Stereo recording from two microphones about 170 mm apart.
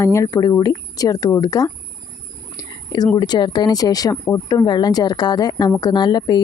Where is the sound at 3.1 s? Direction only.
25° left (ahead or behind).